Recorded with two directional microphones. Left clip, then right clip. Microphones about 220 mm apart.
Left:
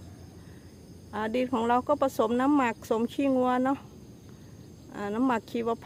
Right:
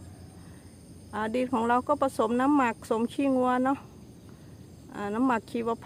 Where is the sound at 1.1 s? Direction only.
Centre (ahead or behind).